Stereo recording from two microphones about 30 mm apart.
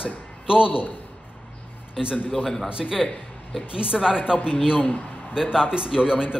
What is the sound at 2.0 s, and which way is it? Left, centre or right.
Speech, centre.